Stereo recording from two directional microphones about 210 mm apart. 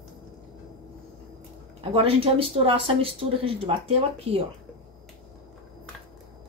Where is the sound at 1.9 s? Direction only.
25° right (ahead or behind).